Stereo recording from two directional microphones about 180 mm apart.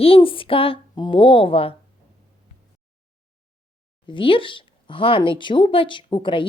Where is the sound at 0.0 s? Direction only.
30° left (ahead or behind).